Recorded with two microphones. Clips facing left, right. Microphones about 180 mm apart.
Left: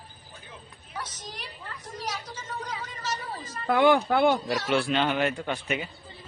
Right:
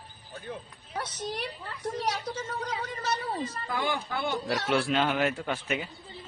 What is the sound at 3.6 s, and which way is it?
Speech, 65° left (ahead or behind).